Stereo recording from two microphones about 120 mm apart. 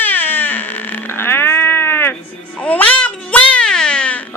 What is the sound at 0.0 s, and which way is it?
Baby cry, 15° left (ahead or behind).